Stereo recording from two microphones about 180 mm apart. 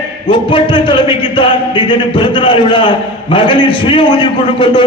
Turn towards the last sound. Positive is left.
turn(degrees=25)  # may be behind; listen again after turning